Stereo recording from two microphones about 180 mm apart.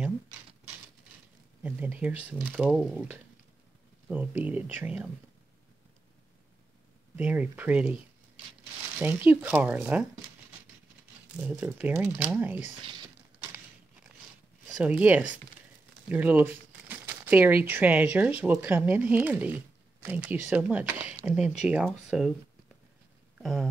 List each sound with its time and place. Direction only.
1.6 s speech: 10° right (ahead or behind)
7.2 s speech: 10° right (ahead or behind)
9.0 s speech: 10° right (ahead or behind)
11.4 s speech: 5° right (ahead or behind)
12.8 s a sound: 25° right (ahead or behind)
14.8 s speech: 10° right (ahead or behind)
23.3 s a sound: centre (ahead or behind)